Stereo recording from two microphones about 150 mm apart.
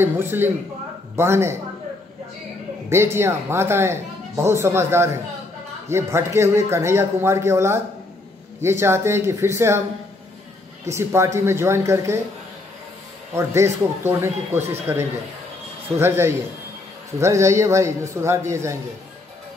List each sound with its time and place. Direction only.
0.0 s speech: 15° right (ahead or behind)
2.9 s speech: 15° right (ahead or behind)
10.9 s a man's voice: 20° right (ahead or behind)
13.3 s a man's voice: 20° right (ahead or behind)